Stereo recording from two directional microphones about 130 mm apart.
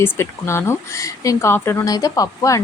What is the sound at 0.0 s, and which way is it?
Speech, 20° left (ahead or behind).